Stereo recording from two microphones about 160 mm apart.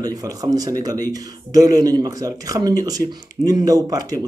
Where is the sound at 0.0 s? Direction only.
25° right (ahead or behind).